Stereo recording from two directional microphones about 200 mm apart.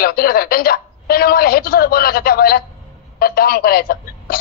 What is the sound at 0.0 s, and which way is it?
Speech, 50° left (ahead or behind).